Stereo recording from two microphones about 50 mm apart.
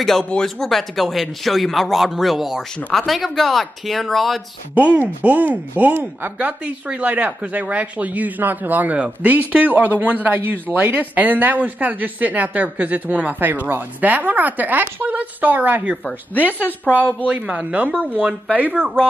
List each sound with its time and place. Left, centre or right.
0.2 s speech: centre
0.7 s speech: centre
4.7 s a man's voice: right
16.5 s a woman's voice: left
17.3 s a man's voice: right